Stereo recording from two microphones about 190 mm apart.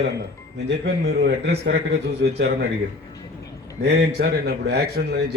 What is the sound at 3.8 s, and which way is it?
Speech, 55° right (ahead or behind).